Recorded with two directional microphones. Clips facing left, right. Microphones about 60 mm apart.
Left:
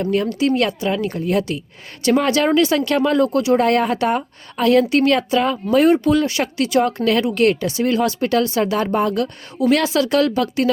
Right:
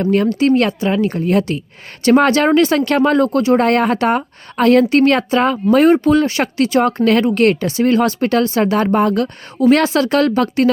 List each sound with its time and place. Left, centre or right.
0.0 s a woman's voice: right